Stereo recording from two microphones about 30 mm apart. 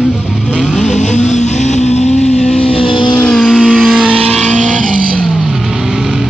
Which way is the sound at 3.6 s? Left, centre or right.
Centre.